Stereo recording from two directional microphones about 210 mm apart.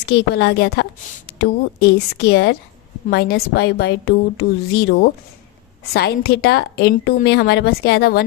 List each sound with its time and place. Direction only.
0.3 s a woman's voice: 50° left (ahead or behind)